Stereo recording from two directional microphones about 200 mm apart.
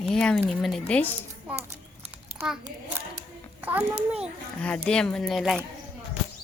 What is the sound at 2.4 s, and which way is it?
A child's voice, 5° right (ahead or behind).